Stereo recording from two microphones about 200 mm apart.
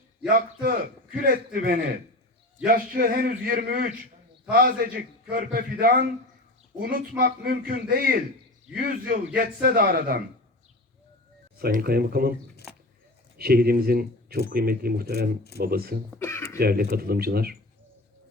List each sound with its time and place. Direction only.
0.3 s a man's voice: 45° right (ahead or behind)
11.6 s a man's voice: 50° right (ahead or behind)
13.3 s a man's voice: 50° right (ahead or behind)
16.1 s a sound: 15° left (ahead or behind)
16.6 s a man's voice: 50° right (ahead or behind)